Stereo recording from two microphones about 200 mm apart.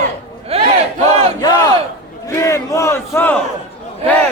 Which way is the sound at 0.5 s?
30° right (ahead or behind).